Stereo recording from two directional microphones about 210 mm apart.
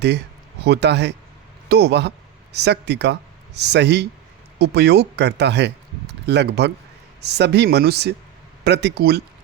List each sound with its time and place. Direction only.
0.6 s speech: 50° right (ahead or behind)